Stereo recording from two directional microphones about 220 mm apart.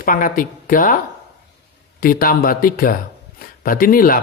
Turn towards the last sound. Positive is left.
turn(degrees=40)  # may be behind; listen again after turning